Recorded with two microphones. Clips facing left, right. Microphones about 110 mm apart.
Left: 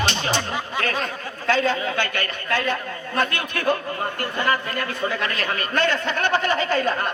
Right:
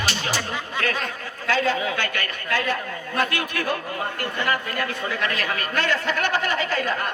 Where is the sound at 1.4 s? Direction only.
30° left (ahead or behind).